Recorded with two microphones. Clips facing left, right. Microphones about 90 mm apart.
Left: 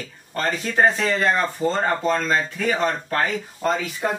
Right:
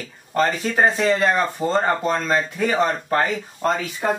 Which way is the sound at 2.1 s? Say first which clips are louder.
Even; 15° right (ahead or behind).